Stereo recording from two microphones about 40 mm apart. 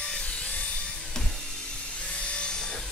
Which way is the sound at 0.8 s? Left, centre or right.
Centre.